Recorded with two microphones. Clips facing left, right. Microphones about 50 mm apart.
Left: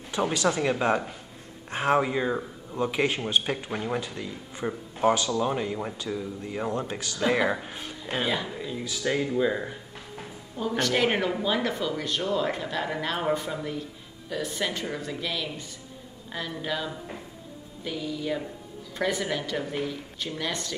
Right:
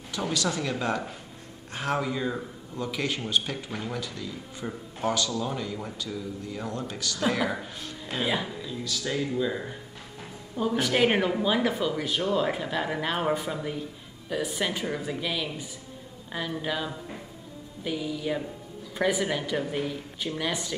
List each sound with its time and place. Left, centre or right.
0.1 s speech: left
10.6 s speech: centre